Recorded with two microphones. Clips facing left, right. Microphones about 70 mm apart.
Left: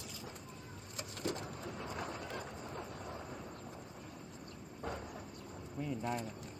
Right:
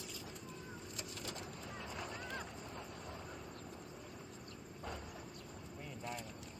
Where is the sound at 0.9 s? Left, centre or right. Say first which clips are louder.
Left 9 dB; left.